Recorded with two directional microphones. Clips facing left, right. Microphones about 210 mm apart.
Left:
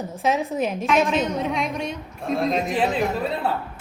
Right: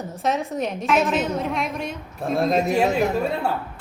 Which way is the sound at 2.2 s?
45° right (ahead or behind).